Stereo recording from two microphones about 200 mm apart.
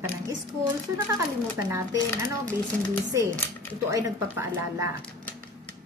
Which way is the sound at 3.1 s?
15° right (ahead or behind).